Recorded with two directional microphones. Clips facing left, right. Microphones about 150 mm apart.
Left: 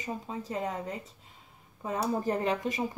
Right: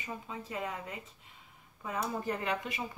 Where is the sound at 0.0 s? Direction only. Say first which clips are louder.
Left 5 dB; 35° left (ahead or behind).